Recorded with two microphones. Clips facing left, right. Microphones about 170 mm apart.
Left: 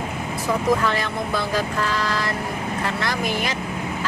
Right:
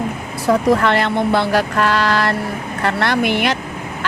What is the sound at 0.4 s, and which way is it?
Speech, 70° right (ahead or behind).